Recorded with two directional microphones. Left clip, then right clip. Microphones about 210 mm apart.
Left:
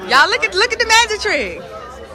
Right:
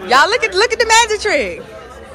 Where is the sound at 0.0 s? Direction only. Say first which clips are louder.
Right 1 dB; 10° left (ahead or behind).